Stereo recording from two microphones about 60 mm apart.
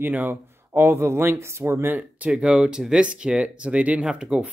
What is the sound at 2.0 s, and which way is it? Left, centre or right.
Speech, right.